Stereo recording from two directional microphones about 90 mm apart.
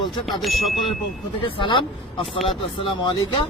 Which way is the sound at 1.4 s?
80° left.